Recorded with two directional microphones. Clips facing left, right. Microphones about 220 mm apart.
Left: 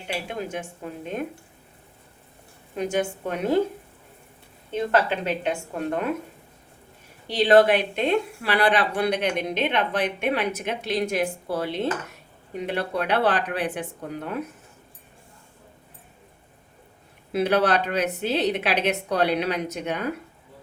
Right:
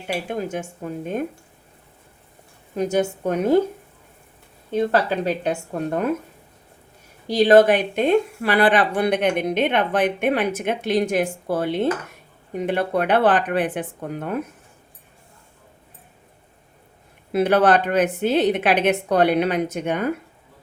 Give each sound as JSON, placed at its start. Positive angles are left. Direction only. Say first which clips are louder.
{"t": 0.1, "sound": "speech", "louder": "right 4 dB", "side_deg": -45}
{"t": 2.7, "sound": "a woman's voice", "louder": "right 4 dB", "side_deg": -40}
{"t": 4.7, "sound": "a woman's voice", "louder": "right 3 dB", "side_deg": -40}
{"t": 7.3, "sound": "speech", "louder": "right 3 dB", "side_deg": -45}
{"t": 17.3, "sound": "speech", "louder": "right 4 dB", "side_deg": -50}